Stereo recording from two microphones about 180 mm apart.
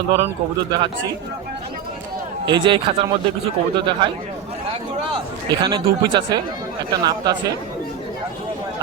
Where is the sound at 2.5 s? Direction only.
25° right (ahead or behind).